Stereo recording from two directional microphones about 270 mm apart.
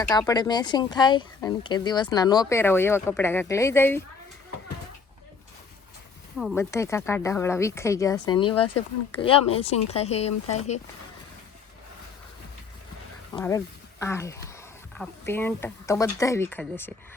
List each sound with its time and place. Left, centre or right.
0.1 s speech: centre
6.3 s speech: centre; by 10.3 s left
13.3 s speech: centre